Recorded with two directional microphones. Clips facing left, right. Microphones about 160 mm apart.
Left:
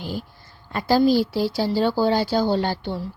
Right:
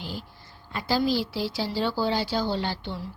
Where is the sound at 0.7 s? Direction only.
45° left (ahead or behind).